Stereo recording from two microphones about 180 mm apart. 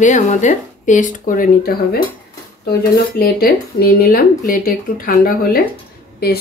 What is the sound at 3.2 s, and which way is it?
Speech, 55° left (ahead or behind).